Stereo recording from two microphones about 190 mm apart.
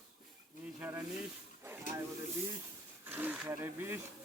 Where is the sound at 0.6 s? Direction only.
10° right (ahead or behind).